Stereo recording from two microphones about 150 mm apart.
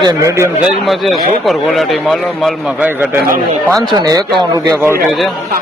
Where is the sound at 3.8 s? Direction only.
25° right (ahead or behind).